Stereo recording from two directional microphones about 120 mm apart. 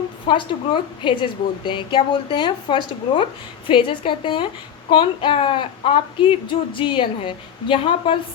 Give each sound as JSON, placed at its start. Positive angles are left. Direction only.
{"t": 0.3, "sound": "a woman's voice", "side_deg": 45}